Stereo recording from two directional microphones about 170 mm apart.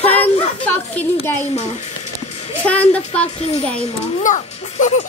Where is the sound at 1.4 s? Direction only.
40° left (ahead or behind).